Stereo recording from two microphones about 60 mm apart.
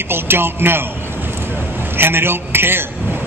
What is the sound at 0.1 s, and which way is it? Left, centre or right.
Speech, right.